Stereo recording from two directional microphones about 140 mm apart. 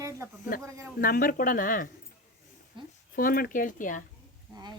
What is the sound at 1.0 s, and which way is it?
Speech, 90° left.